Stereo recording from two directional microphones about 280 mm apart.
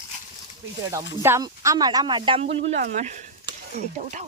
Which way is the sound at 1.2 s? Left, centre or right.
Centre.